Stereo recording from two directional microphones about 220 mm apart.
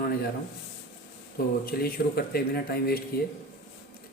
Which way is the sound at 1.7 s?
45° left (ahead or behind).